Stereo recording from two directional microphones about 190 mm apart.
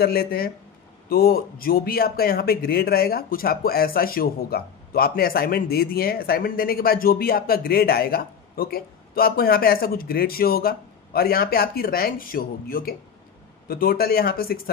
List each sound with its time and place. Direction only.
0.0 s a man's voice: 50° left (ahead or behind)